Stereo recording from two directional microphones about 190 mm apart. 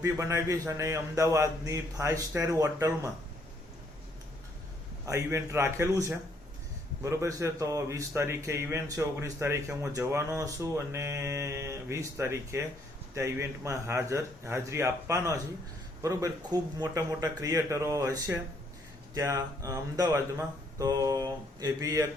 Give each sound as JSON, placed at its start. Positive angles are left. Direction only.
{"t": 0.0, "sound": "a man's voice", "side_deg": -15}
{"t": 5.0, "sound": "a man's voice", "side_deg": -15}